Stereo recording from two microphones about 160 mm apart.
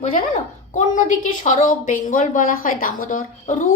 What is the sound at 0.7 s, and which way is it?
A woman's voice, 50° left (ahead or behind).